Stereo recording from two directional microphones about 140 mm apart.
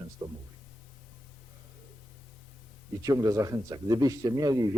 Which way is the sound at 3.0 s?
25° right (ahead or behind).